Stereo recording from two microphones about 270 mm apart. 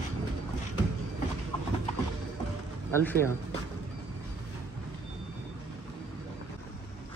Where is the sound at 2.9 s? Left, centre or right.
Centre.